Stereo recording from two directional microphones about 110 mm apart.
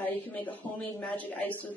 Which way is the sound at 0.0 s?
15° left (ahead or behind).